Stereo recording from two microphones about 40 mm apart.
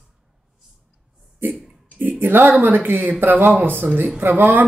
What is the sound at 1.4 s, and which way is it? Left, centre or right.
Speech, right.